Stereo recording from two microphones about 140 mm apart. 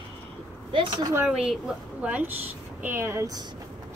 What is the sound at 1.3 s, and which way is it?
Speech, 5° right (ahead or behind).